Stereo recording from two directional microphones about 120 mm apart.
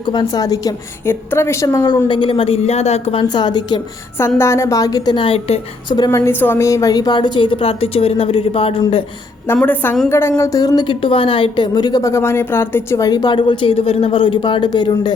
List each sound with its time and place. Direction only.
0.0 s a woman's voice: 40° left (ahead or behind); by 3.2 s 55° left (ahead or behind)
3.2 s speech: 35° left (ahead or behind)
4.4 s speech: 25° left (ahead or behind); by 5.5 s 50° left (ahead or behind)
6.1 s speech: 25° left (ahead or behind); by 8.8 s 50° left (ahead or behind)
9.6 s a woman's voice: 15° left (ahead or behind)
13.1 s speech: 35° left (ahead or behind)